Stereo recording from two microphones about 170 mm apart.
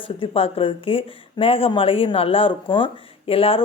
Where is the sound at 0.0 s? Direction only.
30° left (ahead or behind).